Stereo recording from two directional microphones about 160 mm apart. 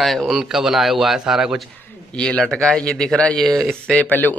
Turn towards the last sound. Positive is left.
turn(degrees=10)  # may be behind; listen again after turning